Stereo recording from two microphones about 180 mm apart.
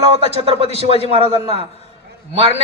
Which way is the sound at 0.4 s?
35° right (ahead or behind).